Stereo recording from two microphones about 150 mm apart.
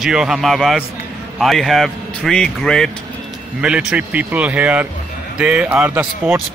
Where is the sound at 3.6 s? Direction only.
5° right (ahead or behind).